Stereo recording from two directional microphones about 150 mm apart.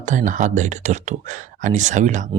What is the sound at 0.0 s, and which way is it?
Speech, 55° right (ahead or behind).